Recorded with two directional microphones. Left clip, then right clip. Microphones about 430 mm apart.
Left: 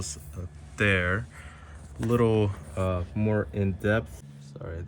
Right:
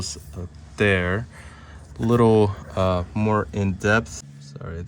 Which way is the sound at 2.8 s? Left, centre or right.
Right.